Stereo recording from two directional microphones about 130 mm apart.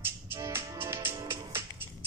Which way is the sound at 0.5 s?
20° right (ahead or behind).